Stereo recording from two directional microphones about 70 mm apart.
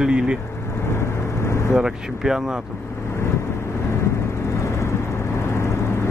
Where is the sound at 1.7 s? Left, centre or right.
Centre.